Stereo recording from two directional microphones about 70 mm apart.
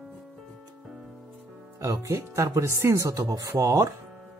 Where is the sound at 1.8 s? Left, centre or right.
Right.